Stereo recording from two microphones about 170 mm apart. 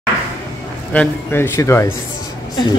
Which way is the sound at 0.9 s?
15° left (ahead or behind).